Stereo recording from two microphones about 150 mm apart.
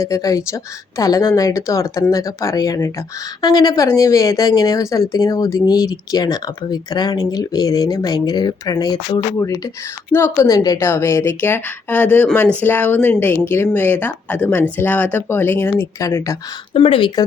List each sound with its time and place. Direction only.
0.0 s speech: 20° left (ahead or behind)
10.1 s a woman's voice: 15° left (ahead or behind)
16.7 s speech: 40° left (ahead or behind)